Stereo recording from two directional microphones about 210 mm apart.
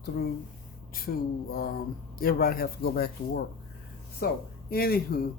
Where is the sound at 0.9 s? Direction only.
45° left (ahead or behind).